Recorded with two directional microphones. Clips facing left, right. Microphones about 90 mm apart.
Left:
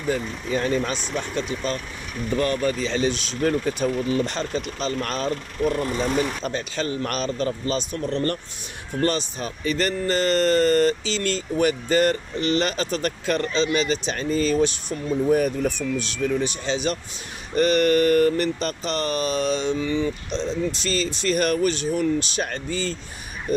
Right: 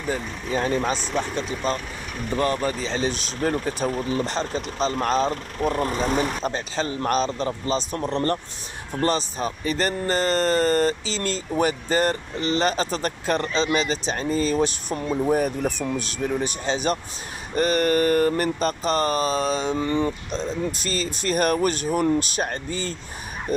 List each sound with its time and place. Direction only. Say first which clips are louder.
0.1 s speech: left 2 dB; 30° right (ahead or behind)